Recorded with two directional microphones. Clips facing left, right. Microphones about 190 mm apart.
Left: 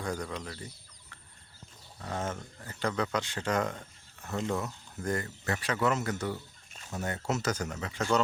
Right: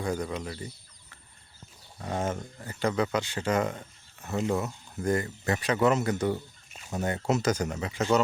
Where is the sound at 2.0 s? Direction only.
15° right (ahead or behind).